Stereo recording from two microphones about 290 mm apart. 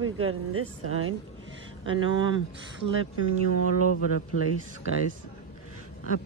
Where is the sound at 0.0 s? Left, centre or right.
Right.